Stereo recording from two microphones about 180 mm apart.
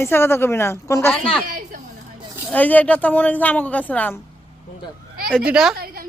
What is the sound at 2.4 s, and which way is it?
Speech, 10° left (ahead or behind).